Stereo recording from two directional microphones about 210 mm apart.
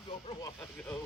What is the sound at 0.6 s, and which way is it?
Speech, 10° left (ahead or behind).